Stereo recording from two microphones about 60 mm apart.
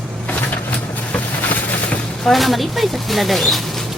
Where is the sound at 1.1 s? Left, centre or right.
Left.